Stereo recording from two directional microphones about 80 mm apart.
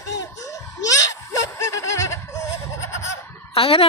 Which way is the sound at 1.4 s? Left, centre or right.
Left.